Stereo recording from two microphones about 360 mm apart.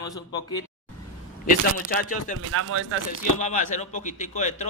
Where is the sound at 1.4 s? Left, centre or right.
Left.